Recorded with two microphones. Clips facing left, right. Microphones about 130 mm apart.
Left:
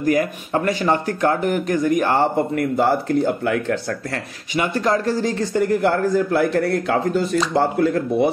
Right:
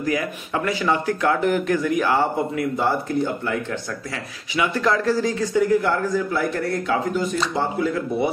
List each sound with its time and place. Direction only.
0.0 s speech: 45° left (ahead or behind)
2.8 s speech: 75° left (ahead or behind)
4.6 s speech: 40° left (ahead or behind)
5.2 s a man's voice: 55° left (ahead or behind)